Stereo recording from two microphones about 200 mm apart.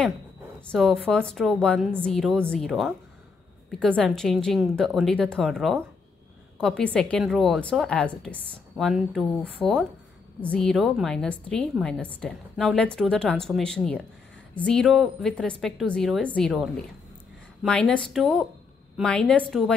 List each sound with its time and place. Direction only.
0.7 s a woman's voice: 5° left (ahead or behind)